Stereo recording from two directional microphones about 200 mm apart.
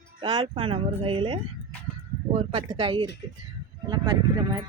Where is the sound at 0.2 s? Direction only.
20° right (ahead or behind).